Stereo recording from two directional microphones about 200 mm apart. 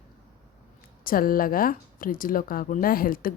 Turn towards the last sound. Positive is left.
turn(degrees=45)  # may be behind; listen again after turning